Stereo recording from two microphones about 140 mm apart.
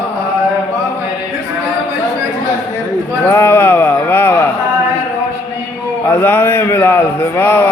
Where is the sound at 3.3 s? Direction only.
20° left (ahead or behind).